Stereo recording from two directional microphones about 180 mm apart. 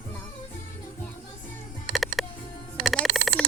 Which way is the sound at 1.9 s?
Centre (ahead or behind).